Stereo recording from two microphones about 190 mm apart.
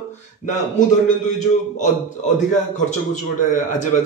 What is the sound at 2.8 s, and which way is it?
A man's voice, 40° left (ahead or behind).